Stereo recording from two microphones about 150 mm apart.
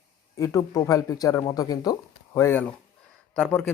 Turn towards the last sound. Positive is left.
turn(degrees=10)  # may be behind; listen again after turning